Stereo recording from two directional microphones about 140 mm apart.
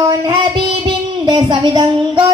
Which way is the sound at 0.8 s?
35° right (ahead or behind).